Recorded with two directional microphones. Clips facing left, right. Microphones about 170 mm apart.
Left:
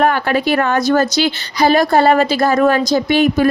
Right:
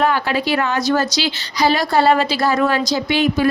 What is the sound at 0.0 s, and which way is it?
A woman's voice, 55° left (ahead or behind).